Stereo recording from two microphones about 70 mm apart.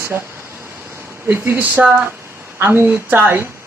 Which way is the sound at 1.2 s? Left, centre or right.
Right.